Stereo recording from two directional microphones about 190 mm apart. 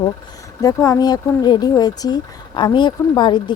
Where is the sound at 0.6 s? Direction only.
20° left (ahead or behind).